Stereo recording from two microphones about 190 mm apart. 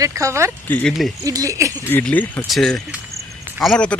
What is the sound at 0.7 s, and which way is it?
Speech, 5° left (ahead or behind).